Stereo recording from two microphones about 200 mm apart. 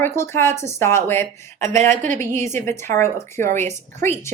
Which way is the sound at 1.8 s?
35° right (ahead or behind).